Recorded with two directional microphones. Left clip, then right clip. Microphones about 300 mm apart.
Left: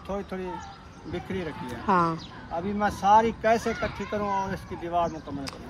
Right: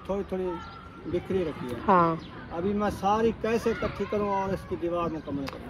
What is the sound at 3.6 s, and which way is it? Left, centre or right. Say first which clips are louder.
Speech: right 1 dB; left.